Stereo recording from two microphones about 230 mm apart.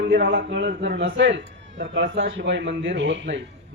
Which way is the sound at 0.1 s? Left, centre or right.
Right.